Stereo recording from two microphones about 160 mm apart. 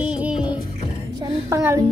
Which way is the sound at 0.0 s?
5° right (ahead or behind).